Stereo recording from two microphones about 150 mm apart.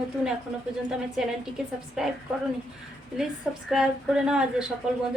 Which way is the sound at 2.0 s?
5° right (ahead or behind).